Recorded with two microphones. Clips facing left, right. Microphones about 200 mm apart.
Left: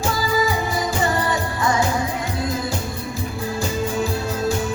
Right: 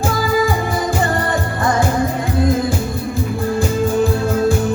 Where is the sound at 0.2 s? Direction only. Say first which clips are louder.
Right 5 dB; 55° right (ahead or behind).